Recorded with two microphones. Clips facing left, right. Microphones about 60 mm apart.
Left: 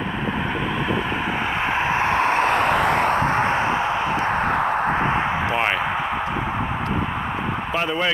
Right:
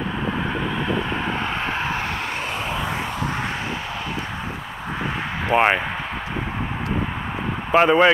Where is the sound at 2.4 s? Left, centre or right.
Left.